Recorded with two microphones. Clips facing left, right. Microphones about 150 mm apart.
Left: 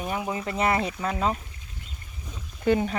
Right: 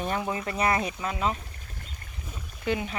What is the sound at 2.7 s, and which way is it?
Speech, 40° left (ahead or behind).